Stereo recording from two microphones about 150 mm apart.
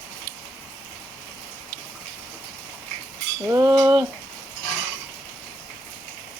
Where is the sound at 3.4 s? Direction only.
25° right (ahead or behind).